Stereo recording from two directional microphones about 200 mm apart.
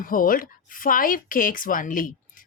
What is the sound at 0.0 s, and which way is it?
Speech, 45° left (ahead or behind).